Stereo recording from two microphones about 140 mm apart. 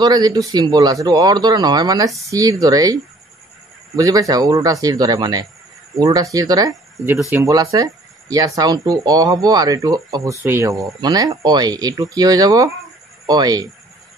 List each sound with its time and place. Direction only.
0.0 s speech: 30° right (ahead or behind)